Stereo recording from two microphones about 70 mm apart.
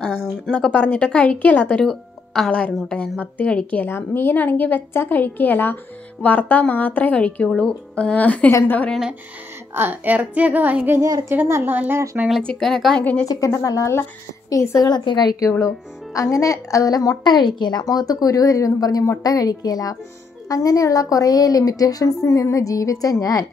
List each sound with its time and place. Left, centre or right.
0.0 s a woman's voice: centre
1.9 s music: centre
2.5 s a woman's voice: centre
9.8 s a woman's voice: right
11.0 s a woman's voice: right
11.2 s a woman's voice: right
12.4 s a woman's voice: centre
12.9 s a woman's voice: centre
13.5 s speech: left
14.9 s a woman's voice: left
15.6 s speech: left